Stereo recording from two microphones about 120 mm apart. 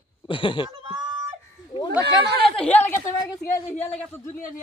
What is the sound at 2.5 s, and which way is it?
Speech, 10° left (ahead or behind).